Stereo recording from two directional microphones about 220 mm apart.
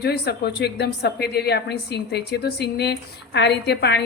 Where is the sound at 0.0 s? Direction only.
50° left (ahead or behind).